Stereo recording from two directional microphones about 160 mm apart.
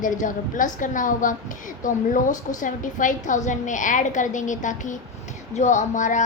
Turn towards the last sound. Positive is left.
turn(degrees=50)  # may be behind; listen again after turning